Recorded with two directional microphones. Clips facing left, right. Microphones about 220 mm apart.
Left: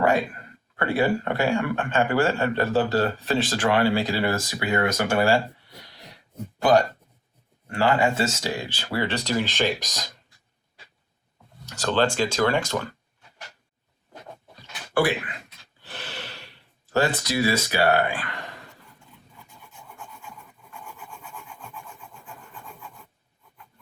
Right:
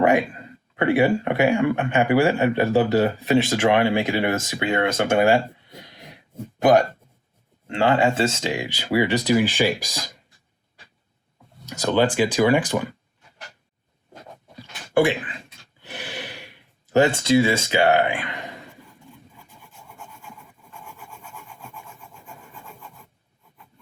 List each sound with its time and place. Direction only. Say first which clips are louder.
0.0 s speech: right 3 dB; 15° right (ahead or behind)
11.7 s speech: right 3 dB; 15° right (ahead or behind)
14.9 s speech: right 4 dB; 25° right (ahead or behind)
15.9 s gasp: right 4 dB; 15° right (ahead or behind)
19.7 s rub: even; centre (ahead or behind)